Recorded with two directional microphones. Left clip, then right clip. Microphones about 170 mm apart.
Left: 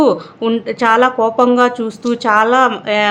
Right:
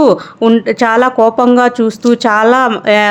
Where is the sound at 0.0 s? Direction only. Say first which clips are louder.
Right 4 dB; 30° right (ahead or behind).